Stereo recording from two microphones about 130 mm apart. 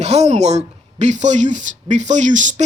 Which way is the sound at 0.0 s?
55° right (ahead or behind).